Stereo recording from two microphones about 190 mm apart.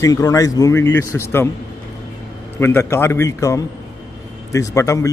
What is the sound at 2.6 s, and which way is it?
Speech, 15° left (ahead or behind).